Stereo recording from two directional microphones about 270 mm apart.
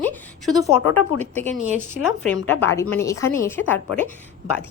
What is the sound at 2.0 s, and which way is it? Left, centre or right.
Speech, left.